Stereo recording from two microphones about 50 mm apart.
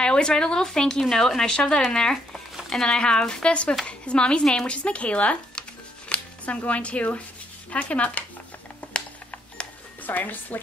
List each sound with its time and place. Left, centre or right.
0.0 s speech: centre
8.9 s camera: left
10.0 s a woman's voice: left